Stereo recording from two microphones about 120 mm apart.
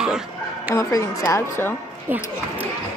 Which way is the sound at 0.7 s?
25° left (ahead or behind).